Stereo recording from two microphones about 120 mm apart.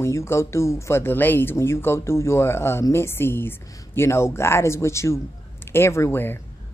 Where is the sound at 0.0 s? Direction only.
25° left (ahead or behind).